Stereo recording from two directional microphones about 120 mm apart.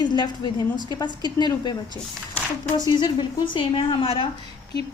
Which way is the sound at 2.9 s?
40° left (ahead or behind).